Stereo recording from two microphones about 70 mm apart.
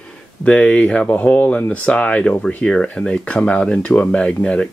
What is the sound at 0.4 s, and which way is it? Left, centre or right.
Speech, centre.